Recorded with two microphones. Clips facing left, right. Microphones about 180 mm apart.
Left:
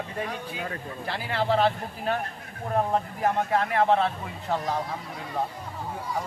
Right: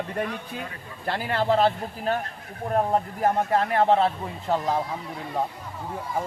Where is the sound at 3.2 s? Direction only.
40° right (ahead or behind).